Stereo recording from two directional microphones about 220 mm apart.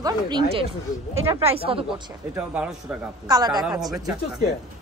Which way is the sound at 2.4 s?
5° right (ahead or behind).